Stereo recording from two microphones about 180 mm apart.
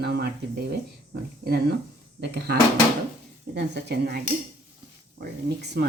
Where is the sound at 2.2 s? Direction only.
65° right (ahead or behind).